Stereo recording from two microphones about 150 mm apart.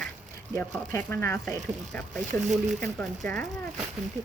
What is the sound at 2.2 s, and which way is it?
Speech, 55° right (ahead or behind).